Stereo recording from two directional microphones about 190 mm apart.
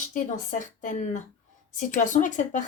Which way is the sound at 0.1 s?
45° left (ahead or behind).